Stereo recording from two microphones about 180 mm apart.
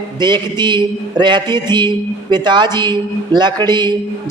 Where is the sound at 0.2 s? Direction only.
25° right (ahead or behind).